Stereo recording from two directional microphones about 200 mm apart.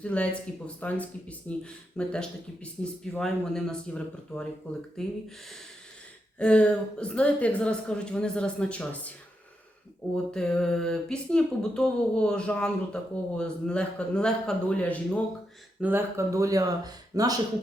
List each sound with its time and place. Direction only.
0.0 s speech: 5° left (ahead or behind)
6.4 s speech: 5° left (ahead or behind)
10.3 s speech: 5° left (ahead or behind)
15.8 s speech: 10° right (ahead or behind)